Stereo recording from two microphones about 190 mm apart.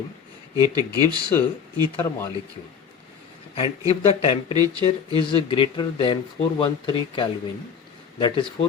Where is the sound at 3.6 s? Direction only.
30° left (ahead or behind).